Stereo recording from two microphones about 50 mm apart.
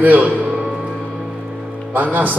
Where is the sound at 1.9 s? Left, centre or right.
Right.